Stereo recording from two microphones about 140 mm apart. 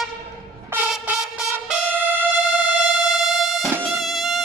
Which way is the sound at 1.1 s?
10° right (ahead or behind).